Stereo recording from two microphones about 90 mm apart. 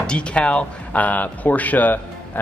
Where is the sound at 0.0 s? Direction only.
10° left (ahead or behind).